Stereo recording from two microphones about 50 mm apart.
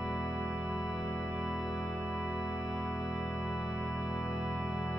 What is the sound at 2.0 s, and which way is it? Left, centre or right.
Organ, centre.